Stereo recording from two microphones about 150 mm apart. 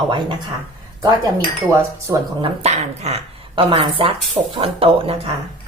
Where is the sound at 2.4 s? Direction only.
45° right (ahead or behind).